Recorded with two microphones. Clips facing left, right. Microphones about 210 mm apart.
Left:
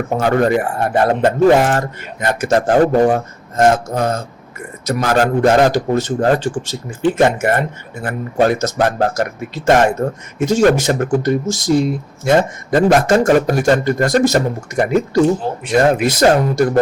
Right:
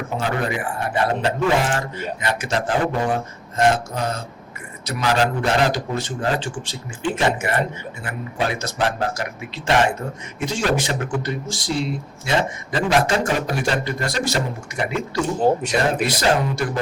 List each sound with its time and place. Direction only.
0.1 s speech: 50° left (ahead or behind)